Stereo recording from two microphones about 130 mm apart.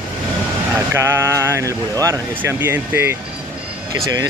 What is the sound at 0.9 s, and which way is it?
Speech, 20° right (ahead or behind).